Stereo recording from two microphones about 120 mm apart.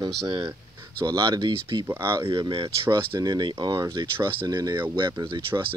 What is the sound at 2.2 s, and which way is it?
Speech, 45° right (ahead or behind).